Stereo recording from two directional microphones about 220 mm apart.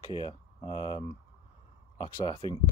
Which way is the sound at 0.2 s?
25° left (ahead or behind).